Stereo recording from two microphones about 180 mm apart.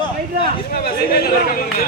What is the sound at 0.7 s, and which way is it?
Speech, 55° left (ahead or behind).